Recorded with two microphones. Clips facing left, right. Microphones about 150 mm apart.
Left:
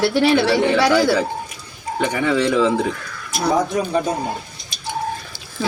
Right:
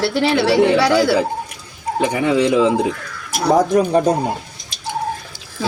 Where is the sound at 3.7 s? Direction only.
45° right (ahead or behind).